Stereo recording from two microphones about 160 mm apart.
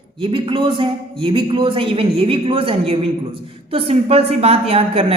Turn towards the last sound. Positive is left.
turn(degrees=-40)  # may be behind; listen again after turning